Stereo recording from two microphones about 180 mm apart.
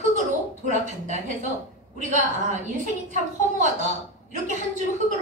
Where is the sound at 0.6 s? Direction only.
40° right (ahead or behind).